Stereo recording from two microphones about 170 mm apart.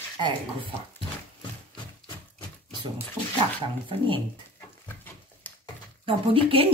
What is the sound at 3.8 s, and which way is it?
Speech, 30° right (ahead or behind).